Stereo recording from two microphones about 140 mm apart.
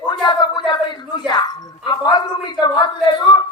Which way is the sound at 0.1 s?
35° left (ahead or behind).